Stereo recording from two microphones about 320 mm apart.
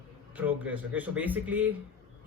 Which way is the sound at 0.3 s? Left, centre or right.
Centre.